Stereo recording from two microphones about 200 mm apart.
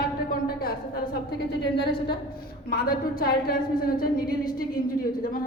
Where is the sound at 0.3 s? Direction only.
50° left (ahead or behind).